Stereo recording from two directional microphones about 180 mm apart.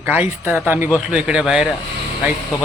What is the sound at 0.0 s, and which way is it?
A man's voice, 10° right (ahead or behind).